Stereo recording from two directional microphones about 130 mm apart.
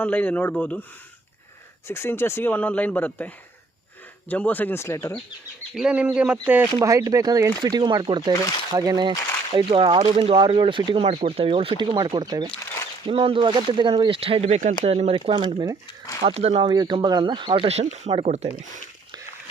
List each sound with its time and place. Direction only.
0.0 s speech: 10° left (ahead or behind)
1.9 s speech: 20° left (ahead or behind)
5.7 s speech: 10° right (ahead or behind)
6.8 s speech: 25° right (ahead or behind)
8.3 s speech: 25° left (ahead or behind)
8.7 s speech: 30° right (ahead or behind)
16.2 s speech: 55° right (ahead or behind)
16.7 s speech: 35° right (ahead or behind)
17.7 s speech: 60° right (ahead or behind)